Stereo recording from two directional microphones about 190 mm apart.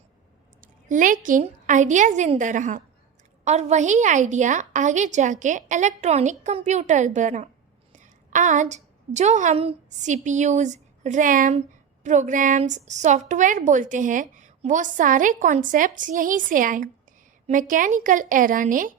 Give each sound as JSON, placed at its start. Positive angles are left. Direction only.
{"t": 0.6, "sound": "a woman's voice", "side_deg": -45}